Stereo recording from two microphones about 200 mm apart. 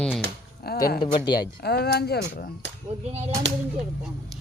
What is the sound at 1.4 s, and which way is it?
Speech, 55° left (ahead or behind).